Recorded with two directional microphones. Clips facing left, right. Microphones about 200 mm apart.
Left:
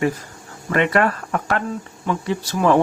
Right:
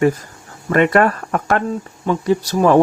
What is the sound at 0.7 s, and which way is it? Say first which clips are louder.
Speech: right 4 dB; 45° right (ahead or behind).